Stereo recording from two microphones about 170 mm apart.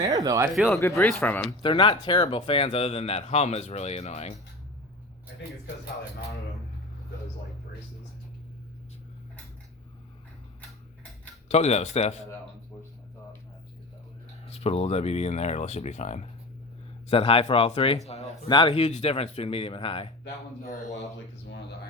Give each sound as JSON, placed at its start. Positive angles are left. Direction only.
{"t": 0.0, "sound": "speech", "side_deg": -20}
{"t": 0.7, "sound": "speech", "side_deg": 15}
{"t": 1.6, "sound": "speech", "side_deg": 30}
{"t": 11.4, "sound": "speech", "side_deg": 40}
{"t": 14.4, "sound": "speech", "side_deg": 35}
{"t": 18.4, "sound": "speech", "side_deg": 30}